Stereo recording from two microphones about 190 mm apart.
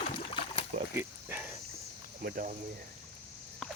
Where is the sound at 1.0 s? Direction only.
10° right (ahead or behind).